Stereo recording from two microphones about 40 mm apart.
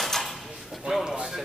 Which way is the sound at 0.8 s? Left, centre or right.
Centre.